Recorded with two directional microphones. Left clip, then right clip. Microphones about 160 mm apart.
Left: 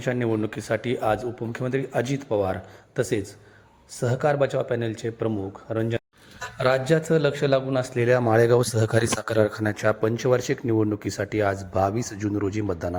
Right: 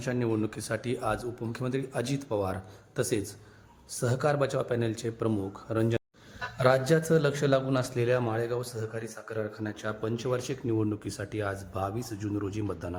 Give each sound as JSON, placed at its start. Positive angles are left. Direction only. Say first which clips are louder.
{"t": 0.0, "sound": "speech", "louder": "left 5 dB", "side_deg": 15}
{"t": 8.3, "sound": "speech", "louder": "left 13 dB", "side_deg": 45}